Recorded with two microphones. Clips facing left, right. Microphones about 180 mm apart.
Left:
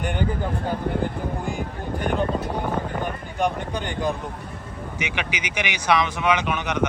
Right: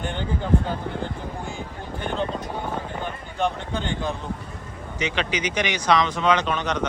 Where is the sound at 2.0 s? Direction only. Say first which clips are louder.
Left 3 dB; 10° left (ahead or behind).